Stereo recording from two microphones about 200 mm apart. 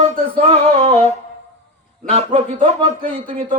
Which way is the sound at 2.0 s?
35° right (ahead or behind).